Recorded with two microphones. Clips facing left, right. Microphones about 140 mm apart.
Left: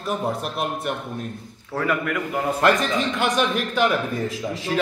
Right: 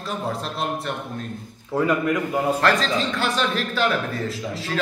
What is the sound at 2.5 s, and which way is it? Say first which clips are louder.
A man's voice: left 1 dB; 20° left (ahead or behind).